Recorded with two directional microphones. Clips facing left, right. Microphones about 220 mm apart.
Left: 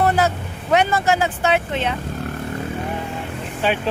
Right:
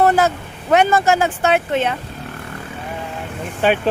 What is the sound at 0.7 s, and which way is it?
Speech, 50° right (ahead or behind).